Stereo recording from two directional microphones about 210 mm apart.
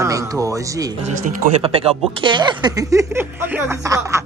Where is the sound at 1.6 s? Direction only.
25° right (ahead or behind).